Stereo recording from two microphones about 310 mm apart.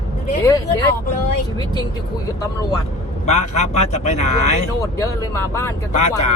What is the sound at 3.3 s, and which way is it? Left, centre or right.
Speech, left.